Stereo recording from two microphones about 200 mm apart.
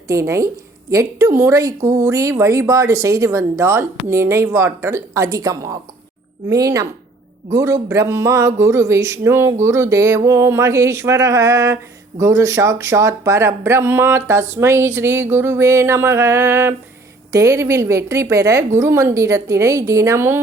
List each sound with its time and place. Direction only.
0.1 s speech: 15° right (ahead or behind)